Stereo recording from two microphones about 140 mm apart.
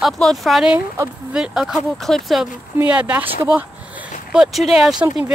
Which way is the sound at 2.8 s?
10° right (ahead or behind).